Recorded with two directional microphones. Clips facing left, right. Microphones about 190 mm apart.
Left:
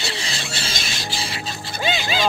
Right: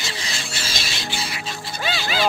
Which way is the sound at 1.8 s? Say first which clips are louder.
Left 2 dB; 20° left (ahead or behind).